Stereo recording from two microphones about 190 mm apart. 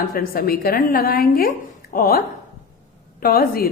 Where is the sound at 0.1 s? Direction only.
50° left (ahead or behind).